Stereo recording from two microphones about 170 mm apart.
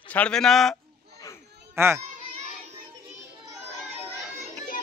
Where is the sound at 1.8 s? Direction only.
15° right (ahead or behind).